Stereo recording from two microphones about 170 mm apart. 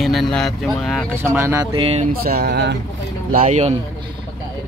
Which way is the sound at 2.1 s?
65° right (ahead or behind).